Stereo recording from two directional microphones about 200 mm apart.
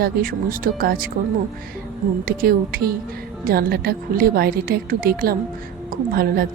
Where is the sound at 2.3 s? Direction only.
45° right (ahead or behind).